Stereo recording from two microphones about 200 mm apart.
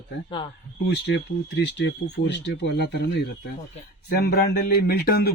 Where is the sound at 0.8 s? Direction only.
60° left (ahead or behind).